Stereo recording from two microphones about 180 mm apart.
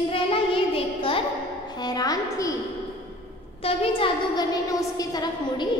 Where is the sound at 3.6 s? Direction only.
30° left (ahead or behind).